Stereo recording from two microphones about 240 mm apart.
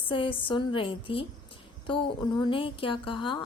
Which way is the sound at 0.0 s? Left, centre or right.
Left.